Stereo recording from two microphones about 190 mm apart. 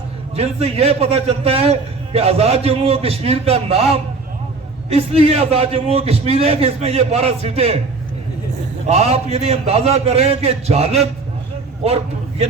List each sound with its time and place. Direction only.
0.3 s a man's voice: 35° right (ahead or behind)
8.9 s a man's voice: 35° right (ahead or behind)